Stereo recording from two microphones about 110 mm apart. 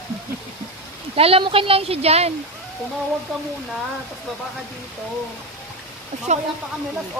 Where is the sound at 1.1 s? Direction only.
60° right (ahead or behind).